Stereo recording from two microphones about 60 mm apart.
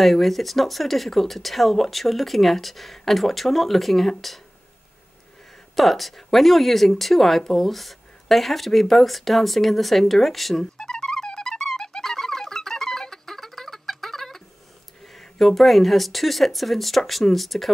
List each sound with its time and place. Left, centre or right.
0.0 s speech: centre
5.8 s speech: centre
10.8 s music: centre
15.1 s speech: centre